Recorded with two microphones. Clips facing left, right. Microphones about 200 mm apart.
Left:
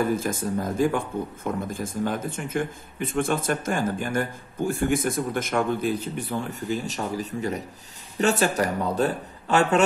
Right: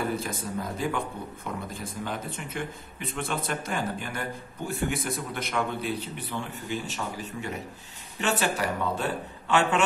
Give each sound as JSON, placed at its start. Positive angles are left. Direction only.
{"t": 0.1, "sound": "a man's voice", "side_deg": 45}